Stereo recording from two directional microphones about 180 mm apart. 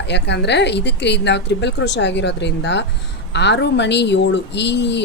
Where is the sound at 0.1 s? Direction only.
75° left (ahead or behind).